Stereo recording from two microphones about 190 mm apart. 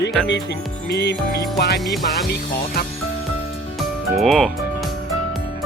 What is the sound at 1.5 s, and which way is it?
Speech, 55° left (ahead or behind).